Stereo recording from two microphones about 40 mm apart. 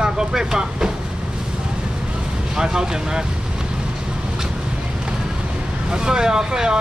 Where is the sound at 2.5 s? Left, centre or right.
Centre.